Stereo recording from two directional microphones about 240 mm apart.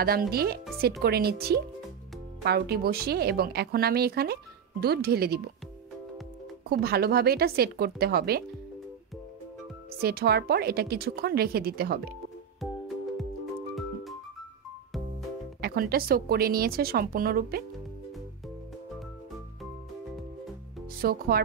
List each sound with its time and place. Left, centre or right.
0.0 s a woman's voice: right
6.7 s a woman's voice: right
9.9 s a woman's voice: right
12.5 s music: centre
15.6 s a woman's voice: right
21.0 s a woman's voice: right